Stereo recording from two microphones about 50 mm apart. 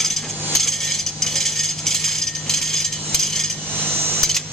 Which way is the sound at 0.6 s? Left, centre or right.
Centre.